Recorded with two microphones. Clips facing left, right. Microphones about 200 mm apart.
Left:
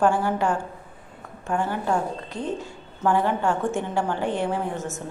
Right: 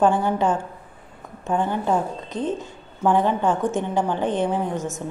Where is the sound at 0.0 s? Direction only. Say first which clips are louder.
Right 2 dB; 20° right (ahead or behind).